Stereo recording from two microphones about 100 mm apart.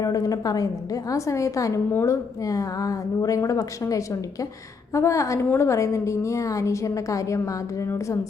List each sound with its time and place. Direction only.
0.0 s a woman's voice: 35° left (ahead or behind)
1.9 s a woman's voice: 20° left (ahead or behind)
2.4 s a woman's voice: 35° left (ahead or behind)